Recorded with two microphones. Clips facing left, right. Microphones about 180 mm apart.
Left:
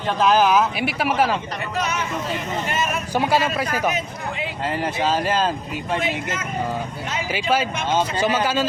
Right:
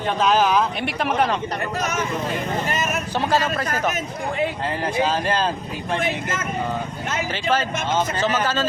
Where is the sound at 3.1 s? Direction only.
10° left (ahead or behind).